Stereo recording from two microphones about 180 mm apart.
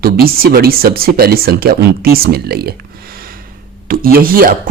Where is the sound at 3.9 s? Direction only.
55° right (ahead or behind).